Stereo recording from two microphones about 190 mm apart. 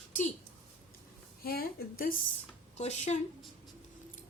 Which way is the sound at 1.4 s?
50° left (ahead or behind).